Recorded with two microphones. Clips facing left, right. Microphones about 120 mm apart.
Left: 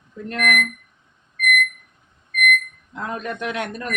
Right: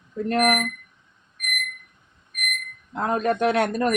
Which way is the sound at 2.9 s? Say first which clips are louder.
Right 6 dB; 40° right (ahead or behind).